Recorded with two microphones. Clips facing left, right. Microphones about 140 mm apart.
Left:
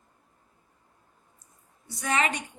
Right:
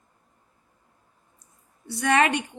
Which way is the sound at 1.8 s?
65° right (ahead or behind).